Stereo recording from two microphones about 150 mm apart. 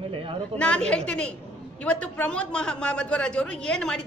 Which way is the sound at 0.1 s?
35° right (ahead or behind).